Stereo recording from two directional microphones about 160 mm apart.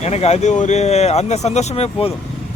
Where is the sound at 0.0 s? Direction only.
40° left (ahead or behind).